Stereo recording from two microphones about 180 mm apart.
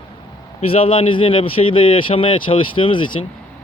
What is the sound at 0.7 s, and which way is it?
Speech, 30° left (ahead or behind).